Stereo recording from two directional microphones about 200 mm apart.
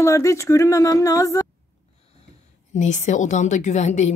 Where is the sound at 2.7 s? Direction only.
35° left (ahead or behind).